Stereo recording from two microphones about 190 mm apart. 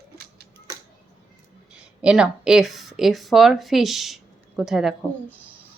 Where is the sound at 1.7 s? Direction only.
5° right (ahead or behind).